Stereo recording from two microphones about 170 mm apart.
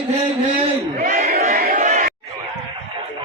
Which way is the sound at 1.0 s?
50° right (ahead or behind).